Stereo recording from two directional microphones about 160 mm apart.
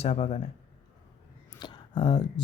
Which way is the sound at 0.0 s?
40° left (ahead or behind).